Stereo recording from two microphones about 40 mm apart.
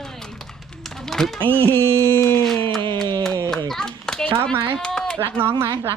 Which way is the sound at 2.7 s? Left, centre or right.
Centre.